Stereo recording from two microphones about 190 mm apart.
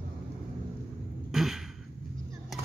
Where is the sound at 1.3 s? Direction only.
Centre (ahead or behind).